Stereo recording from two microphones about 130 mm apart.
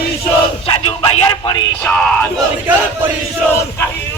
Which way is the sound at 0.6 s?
45° left (ahead or behind).